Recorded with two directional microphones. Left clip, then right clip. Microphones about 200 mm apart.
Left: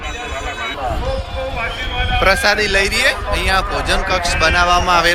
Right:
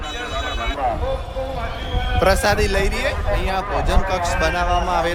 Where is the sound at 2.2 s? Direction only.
20° right (ahead or behind).